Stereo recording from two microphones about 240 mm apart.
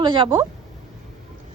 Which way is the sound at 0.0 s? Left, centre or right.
Right.